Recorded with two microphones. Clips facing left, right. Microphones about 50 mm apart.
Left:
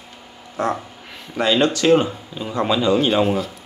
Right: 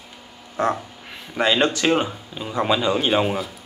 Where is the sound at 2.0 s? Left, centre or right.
Centre.